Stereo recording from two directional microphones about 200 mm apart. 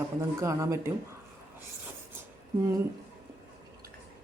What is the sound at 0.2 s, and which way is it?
Speech, 15° right (ahead or behind).